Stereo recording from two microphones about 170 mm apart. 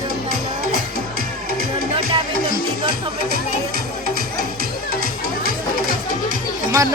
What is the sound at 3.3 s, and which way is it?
Music, 65° right (ahead or behind).